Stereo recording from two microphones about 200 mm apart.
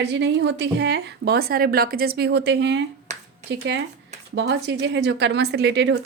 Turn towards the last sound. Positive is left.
turn(degrees=-60)  # may be behind; listen again after turning